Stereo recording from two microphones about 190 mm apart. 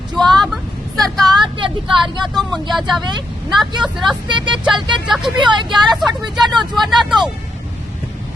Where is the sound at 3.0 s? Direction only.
20° right (ahead or behind).